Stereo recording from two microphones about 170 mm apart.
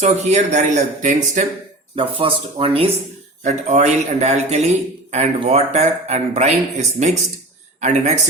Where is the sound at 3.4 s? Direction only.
45° right (ahead or behind).